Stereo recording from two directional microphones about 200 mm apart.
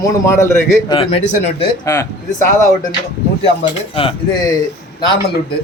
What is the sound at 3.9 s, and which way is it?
Speech, 25° left (ahead or behind).